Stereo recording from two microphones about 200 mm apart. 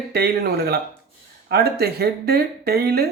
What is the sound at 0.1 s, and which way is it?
Speech, 50° right (ahead or behind).